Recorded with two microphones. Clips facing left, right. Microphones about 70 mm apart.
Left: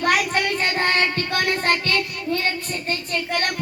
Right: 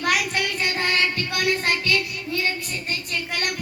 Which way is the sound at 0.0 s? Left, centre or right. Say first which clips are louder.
Left 3 dB; left.